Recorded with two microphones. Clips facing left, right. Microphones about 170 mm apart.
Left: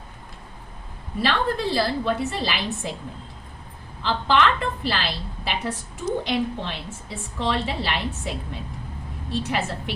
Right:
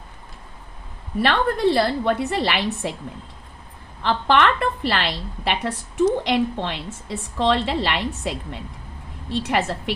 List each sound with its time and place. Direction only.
1.2 s a woman's voice: 60° right (ahead or behind)
4.0 s a woman's voice: 60° right (ahead or behind)
9.5 s a woman's voice: 70° right (ahead or behind)